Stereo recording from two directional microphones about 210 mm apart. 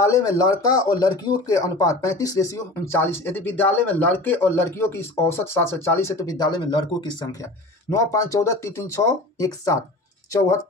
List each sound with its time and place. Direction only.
0.0 s speech: 15° left (ahead or behind)